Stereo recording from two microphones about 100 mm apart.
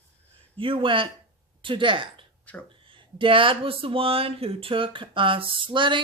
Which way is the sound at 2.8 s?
60° right (ahead or behind).